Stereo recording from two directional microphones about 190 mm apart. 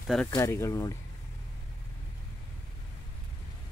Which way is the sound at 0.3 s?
15° left (ahead or behind).